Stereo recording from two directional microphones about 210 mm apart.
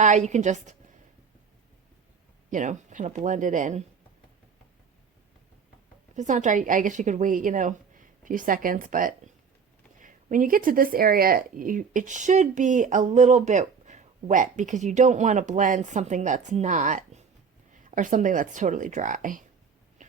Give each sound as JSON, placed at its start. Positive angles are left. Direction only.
{"t": 0.0, "sound": "speech", "side_deg": -35}
{"t": 2.5, "sound": "speech", "side_deg": -35}
{"t": 6.1, "sound": "speech", "side_deg": -35}
{"t": 20.0, "sound": "a sound", "side_deg": -35}